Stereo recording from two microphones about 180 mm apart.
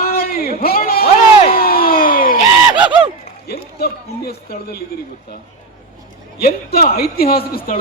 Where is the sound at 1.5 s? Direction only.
55° left (ahead or behind).